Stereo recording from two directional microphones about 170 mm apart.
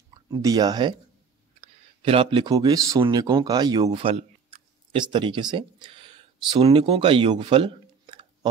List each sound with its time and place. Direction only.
0.3 s speech: 20° right (ahead or behind)
1.6 s speech: 35° right (ahead or behind)